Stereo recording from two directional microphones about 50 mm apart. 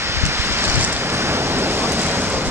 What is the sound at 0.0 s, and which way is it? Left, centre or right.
Waves, right.